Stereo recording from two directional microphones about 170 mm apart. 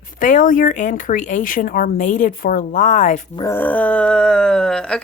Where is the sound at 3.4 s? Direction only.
15° left (ahead or behind).